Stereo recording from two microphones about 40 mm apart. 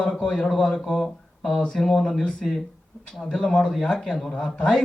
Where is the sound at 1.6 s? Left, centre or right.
Centre.